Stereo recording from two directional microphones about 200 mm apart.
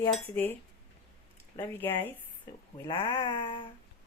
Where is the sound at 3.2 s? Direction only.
25° left (ahead or behind).